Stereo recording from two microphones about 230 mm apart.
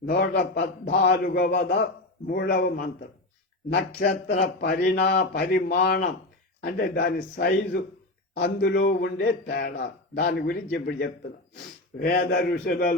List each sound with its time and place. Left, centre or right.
0.1 s a man's voice: left